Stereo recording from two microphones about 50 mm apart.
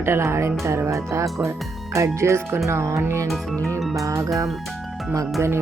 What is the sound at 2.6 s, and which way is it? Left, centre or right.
Speech, right.